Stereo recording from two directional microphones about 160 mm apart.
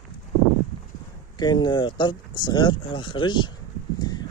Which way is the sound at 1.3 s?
30° left (ahead or behind).